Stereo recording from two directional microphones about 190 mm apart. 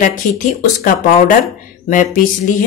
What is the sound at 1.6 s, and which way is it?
Speech, 45° left (ahead or behind).